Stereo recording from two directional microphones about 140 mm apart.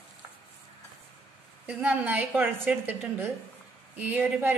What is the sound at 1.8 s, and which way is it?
A woman's voice, 10° right (ahead or behind).